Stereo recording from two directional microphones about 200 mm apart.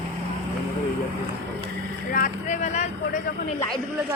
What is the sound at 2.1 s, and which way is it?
Vehicle, 40° left (ahead or behind).